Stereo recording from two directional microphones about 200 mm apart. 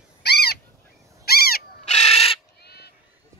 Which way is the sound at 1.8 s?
35° left (ahead or behind).